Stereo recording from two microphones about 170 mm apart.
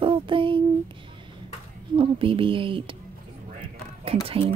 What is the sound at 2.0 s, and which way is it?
Speech, 30° right (ahead or behind).